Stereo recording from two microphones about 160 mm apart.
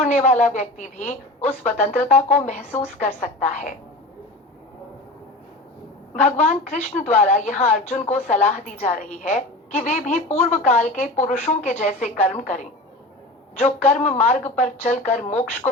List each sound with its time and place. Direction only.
0.0 s a woman's voice: 50° left (ahead or behind)
6.1 s a woman's voice: 50° left (ahead or behind)